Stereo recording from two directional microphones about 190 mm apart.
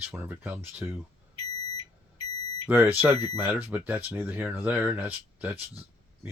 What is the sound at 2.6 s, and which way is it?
Speech, 10° right (ahead or behind).